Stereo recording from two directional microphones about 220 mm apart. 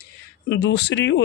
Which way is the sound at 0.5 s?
50° left (ahead or behind).